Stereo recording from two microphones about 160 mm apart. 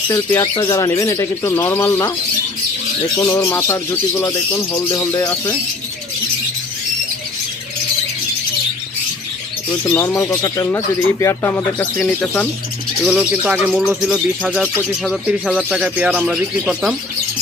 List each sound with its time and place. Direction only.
0.1 s speech: 20° left (ahead or behind)
3.2 s speech: 15° left (ahead or behind)
9.8 s speech: 20° left (ahead or behind); by 16.9 s centre (ahead or behind)